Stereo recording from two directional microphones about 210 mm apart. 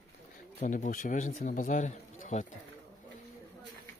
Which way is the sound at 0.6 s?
35° left (ahead or behind).